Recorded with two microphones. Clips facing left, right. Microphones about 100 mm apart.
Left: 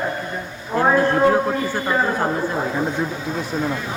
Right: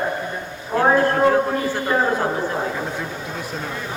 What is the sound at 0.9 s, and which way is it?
A man's voice, 5° left (ahead or behind).